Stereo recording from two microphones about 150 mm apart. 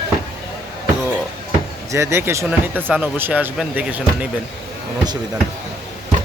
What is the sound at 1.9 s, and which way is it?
Speech, 20° right (ahead or behind).